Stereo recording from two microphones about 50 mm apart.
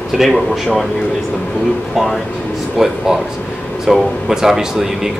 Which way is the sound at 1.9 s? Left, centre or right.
Centre.